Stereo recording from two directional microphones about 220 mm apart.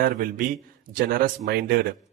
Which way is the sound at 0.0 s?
40° right (ahead or behind).